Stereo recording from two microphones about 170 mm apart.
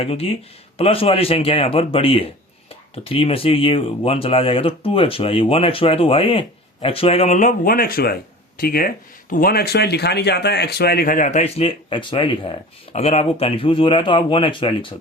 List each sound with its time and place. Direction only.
0.0 s speech: 35° left (ahead or behind)